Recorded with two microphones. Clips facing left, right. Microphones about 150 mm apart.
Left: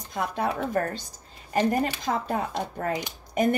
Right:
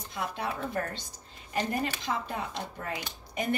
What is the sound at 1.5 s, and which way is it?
Speech, 45° left (ahead or behind).